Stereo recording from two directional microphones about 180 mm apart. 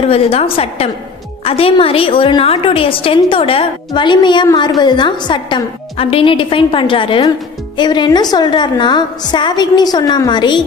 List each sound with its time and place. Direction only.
0.1 s a woman's voice: 35° left (ahead or behind)